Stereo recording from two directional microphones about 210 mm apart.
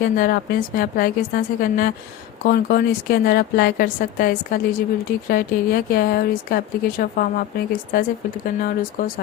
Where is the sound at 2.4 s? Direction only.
45° left (ahead or behind).